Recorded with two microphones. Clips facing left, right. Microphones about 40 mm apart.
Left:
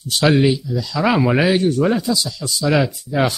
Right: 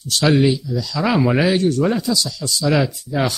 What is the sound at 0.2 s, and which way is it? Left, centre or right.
Speech, centre.